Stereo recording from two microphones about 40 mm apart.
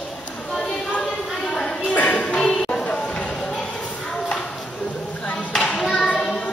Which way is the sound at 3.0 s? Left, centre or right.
Centre.